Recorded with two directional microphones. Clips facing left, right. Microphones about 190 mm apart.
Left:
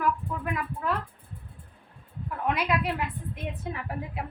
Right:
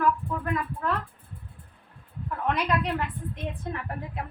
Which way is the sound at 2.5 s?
10° left (ahead or behind).